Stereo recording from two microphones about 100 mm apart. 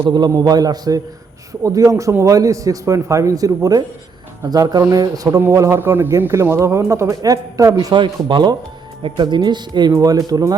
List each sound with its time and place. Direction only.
0.0 s a man's voice: 45° right (ahead or behind)
7.9 s a man's voice: 55° right (ahead or behind); by 10.5 s 40° right (ahead or behind)